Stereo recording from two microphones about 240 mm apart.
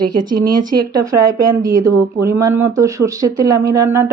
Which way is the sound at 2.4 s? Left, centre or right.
Centre.